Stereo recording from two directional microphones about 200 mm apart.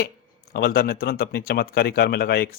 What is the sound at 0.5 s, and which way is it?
Speech, 50° left (ahead or behind).